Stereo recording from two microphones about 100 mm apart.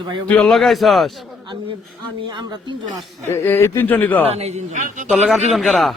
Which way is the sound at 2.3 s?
45° right (ahead or behind).